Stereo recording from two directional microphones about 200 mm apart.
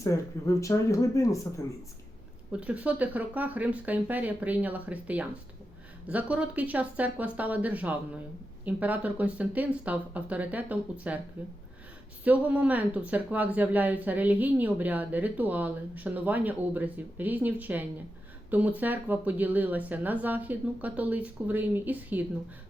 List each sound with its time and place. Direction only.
0.0 s speech: 15° left (ahead or behind)
2.5 s speech: 5° right (ahead or behind)
12.2 s speech: 5° right (ahead or behind)